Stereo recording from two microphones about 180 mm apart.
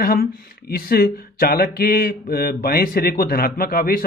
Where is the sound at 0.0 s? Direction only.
55° left (ahead or behind).